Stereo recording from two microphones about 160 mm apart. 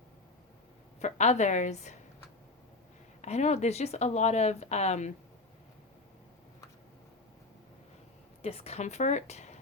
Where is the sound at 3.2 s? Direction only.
45° left (ahead or behind).